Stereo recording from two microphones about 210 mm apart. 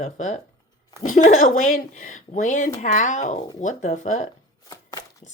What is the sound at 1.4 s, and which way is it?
Speech, 40° left (ahead or behind).